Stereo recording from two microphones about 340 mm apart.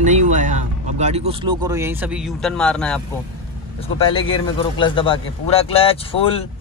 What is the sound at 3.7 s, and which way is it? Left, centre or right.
A man's voice, centre.